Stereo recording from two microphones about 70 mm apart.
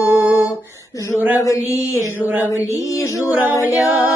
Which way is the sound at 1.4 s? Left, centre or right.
Left.